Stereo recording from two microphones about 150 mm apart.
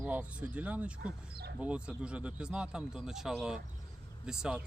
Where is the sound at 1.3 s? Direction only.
90° right.